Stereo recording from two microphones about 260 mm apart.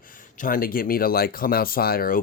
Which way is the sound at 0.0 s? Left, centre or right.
Left.